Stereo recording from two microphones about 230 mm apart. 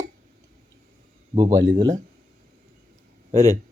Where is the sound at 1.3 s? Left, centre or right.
Centre.